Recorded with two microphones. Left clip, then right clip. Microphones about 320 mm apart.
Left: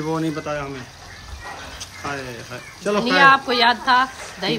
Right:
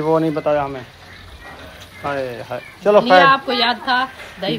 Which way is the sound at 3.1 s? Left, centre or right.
Left.